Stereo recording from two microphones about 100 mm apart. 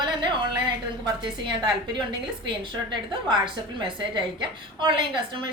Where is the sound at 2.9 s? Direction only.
50° right (ahead or behind).